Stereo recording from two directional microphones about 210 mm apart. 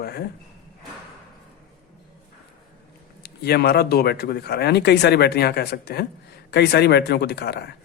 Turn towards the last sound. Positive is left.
turn(degrees=50)  # may be behind; listen again after turning